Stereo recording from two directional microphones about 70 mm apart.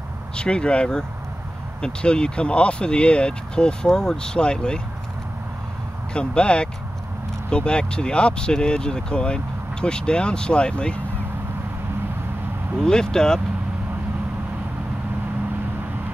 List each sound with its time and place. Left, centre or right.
0.4 s speech: centre
6.1 s speech: centre
12.8 s speech: centre